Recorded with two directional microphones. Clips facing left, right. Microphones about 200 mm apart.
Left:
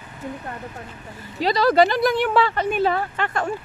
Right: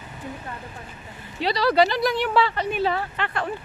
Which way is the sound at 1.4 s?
45° left (ahead or behind).